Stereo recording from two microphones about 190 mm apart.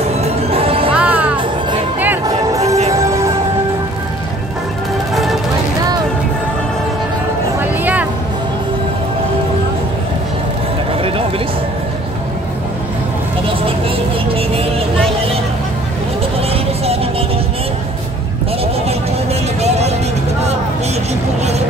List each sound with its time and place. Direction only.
0.0 s music: 30° right (ahead or behind)
0.9 s music: 10° right (ahead or behind)
5.1 s music: centre (ahead or behind)
7.6 s vehicle: 10° right (ahead or behind)
11.0 s music: 30° right (ahead or behind)
14.3 s vehicle: 30° right (ahead or behind)
16.5 s vehicle: 30° right (ahead or behind)